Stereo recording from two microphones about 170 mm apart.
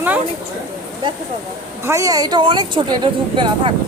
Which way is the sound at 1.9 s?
20° right (ahead or behind).